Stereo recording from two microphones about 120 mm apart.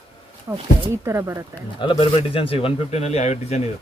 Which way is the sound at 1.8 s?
45° left (ahead or behind).